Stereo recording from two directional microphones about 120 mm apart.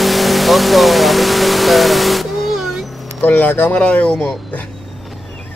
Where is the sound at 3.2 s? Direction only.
15° left (ahead or behind).